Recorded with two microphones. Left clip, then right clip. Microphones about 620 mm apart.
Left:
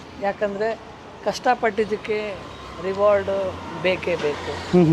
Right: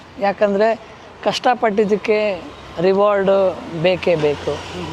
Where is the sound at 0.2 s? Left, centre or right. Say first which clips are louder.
Right 8 dB; right.